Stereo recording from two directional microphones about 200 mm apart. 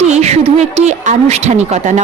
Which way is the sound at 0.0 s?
35° right (ahead or behind).